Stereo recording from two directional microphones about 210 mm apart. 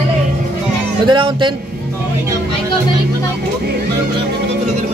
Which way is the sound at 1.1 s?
20° right (ahead or behind).